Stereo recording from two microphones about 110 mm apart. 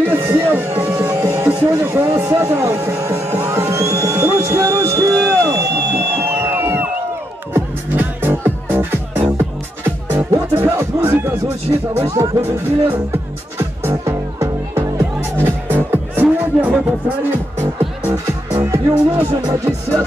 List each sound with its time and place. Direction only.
0.0 s music: 20° right (ahead or behind)
1.5 s a sound: 25° right (ahead or behind)
6.1 s music: 25° right (ahead or behind)
10.6 s speech: 20° right (ahead or behind)
12.4 s music: 15° right (ahead or behind)
19.5 s speech: 25° right (ahead or behind)